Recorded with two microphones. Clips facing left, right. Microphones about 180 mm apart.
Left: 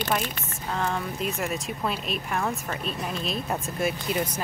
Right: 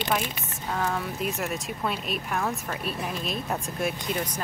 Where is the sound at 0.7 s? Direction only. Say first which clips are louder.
Even; centre (ahead or behind).